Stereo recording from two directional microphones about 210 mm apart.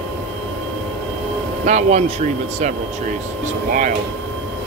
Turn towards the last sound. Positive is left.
turn(degrees=-40)  # may be behind; listen again after turning